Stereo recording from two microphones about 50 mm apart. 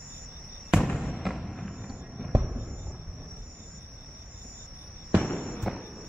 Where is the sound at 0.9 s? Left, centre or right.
Centre.